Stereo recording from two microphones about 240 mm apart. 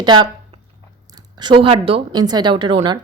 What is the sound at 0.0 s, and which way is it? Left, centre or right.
A woman's voice, centre.